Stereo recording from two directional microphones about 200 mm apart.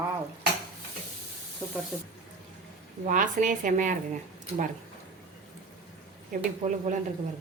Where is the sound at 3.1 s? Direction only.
40° right (ahead or behind).